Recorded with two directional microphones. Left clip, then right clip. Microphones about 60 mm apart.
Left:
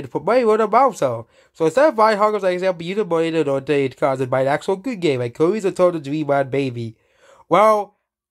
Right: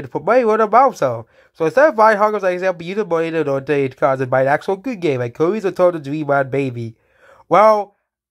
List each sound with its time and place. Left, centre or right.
0.0 s speech: right
7.4 s speech: right